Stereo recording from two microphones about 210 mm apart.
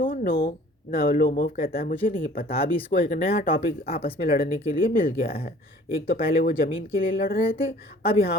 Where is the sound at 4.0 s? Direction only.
45° left (ahead or behind).